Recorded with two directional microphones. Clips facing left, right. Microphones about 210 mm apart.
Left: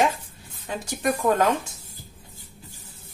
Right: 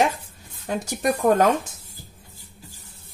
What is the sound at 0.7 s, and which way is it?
Speech, 45° right (ahead or behind).